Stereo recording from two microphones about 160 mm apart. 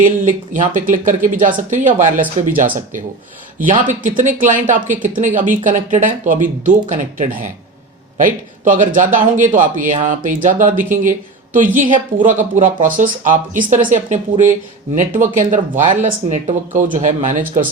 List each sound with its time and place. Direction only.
0.0 s speech: 55° right (ahead or behind)
3.6 s speech: 55° right (ahead or behind)